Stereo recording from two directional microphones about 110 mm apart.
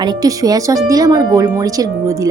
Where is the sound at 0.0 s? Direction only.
40° right (ahead or behind).